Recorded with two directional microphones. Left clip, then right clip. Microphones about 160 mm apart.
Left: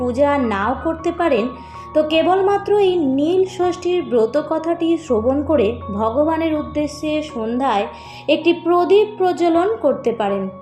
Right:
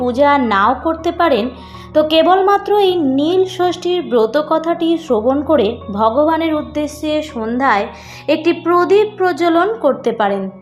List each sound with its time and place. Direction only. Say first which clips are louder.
0.0 s speech: right 4 dB; 20° right (ahead or behind)